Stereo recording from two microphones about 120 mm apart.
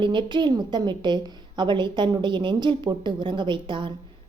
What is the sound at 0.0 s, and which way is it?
A woman's voice, 40° right (ahead or behind).